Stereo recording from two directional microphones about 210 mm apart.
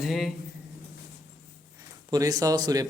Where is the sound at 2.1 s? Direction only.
15° right (ahead or behind).